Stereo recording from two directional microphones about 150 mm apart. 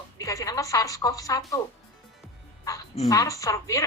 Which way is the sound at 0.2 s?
20° left (ahead or behind).